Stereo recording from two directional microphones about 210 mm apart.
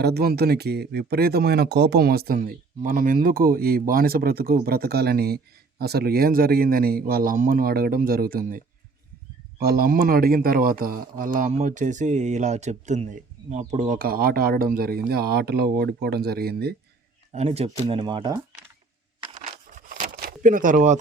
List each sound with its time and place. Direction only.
0.0 s a man's voice: 50° right (ahead or behind)
17.3 s speech: 30° right (ahead or behind)
19.7 s a sound: 40° right (ahead or behind)